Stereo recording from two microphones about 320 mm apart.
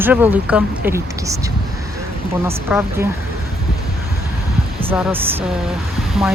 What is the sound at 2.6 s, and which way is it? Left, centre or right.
Speech, centre.